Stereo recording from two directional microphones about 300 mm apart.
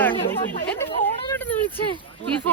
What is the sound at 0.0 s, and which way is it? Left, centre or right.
Chatter, centre.